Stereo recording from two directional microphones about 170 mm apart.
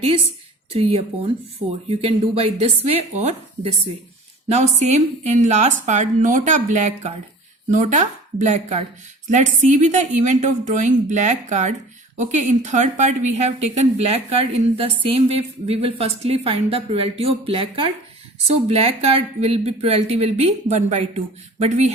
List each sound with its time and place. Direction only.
0.7 s a woman's voice: 35° right (ahead or behind)